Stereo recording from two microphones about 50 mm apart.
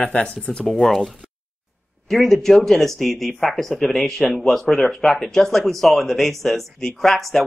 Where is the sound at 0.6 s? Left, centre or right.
Centre.